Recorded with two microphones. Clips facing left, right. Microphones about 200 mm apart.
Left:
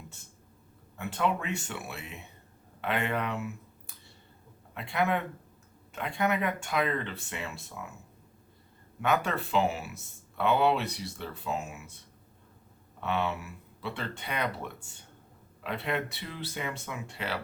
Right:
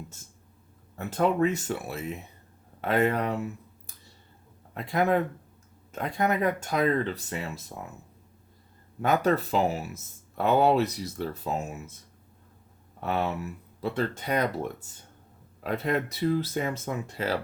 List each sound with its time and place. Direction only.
0.9 s speech: 40° right (ahead or behind)
9.0 s speech: 40° right (ahead or behind)
13.0 s speech: 40° right (ahead or behind)